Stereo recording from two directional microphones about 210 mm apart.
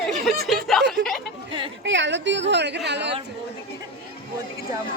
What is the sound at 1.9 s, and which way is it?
A woman's voice, 60° right (ahead or behind).